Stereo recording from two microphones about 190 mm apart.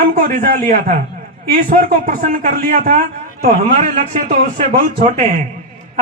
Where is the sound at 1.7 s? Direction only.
45° right (ahead or behind).